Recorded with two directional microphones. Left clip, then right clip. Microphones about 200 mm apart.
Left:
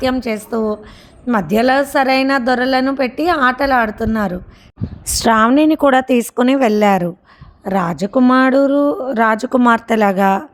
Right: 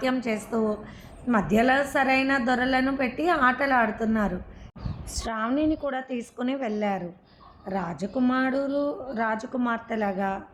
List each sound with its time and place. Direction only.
0.0 s a woman's voice: 45° left (ahead or behind)